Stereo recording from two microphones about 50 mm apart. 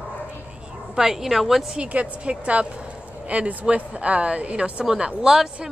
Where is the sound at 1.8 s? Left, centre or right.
Right.